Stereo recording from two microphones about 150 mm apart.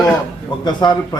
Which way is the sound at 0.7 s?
30° left (ahead or behind).